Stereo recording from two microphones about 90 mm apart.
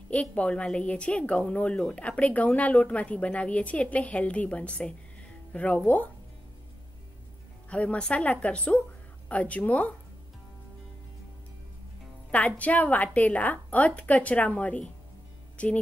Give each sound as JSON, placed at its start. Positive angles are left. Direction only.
{"t": 0.1, "sound": "a woman's voice", "side_deg": 15}
{"t": 7.7, "sound": "a woman's voice", "side_deg": 15}
{"t": 12.3, "sound": "a woman's voice", "side_deg": 15}
{"t": 15.5, "sound": "music", "side_deg": 15}